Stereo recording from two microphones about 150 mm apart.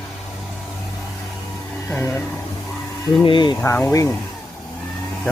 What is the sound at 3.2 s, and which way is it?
Snake, 30° left (ahead or behind).